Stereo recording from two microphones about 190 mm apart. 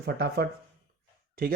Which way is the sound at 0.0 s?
60° right (ahead or behind).